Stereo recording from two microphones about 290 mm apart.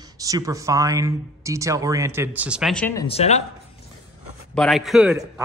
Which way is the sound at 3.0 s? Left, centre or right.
Left.